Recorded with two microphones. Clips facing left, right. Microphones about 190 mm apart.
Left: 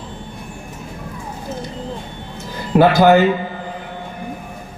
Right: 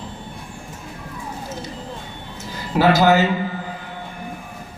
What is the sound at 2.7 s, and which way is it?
Speech, 55° left (ahead or behind).